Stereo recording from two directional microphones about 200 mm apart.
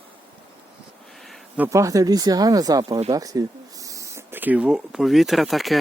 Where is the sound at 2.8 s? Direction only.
30° right (ahead or behind).